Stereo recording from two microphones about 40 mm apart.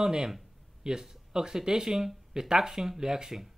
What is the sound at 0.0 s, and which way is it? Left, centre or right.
Speech, centre.